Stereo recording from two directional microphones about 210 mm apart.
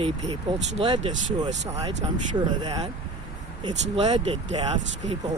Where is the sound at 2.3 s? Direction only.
20° right (ahead or behind).